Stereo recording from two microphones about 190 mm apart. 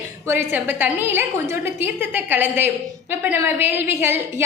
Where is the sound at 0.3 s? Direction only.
10° right (ahead or behind).